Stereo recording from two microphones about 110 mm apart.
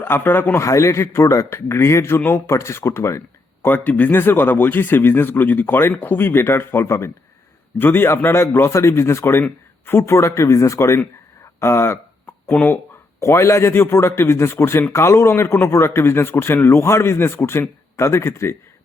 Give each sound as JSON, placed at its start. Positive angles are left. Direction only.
{"t": 0.0, "sound": "a man's voice", "side_deg": 20}